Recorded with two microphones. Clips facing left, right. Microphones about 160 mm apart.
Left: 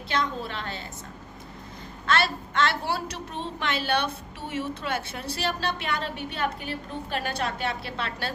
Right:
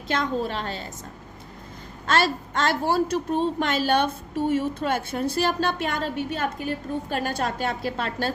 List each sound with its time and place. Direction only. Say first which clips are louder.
0.1 s a woman's voice: right 4 dB; 45° right (ahead or behind)
2.0 s a woman's voice: right 3 dB; 45° right (ahead or behind)